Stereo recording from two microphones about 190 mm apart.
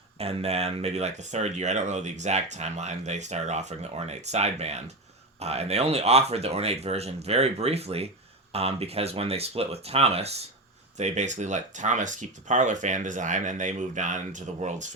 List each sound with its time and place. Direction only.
0.2 s speech: 30° right (ahead or behind)